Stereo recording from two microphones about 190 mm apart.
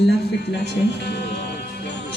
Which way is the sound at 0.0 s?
60° left (ahead or behind).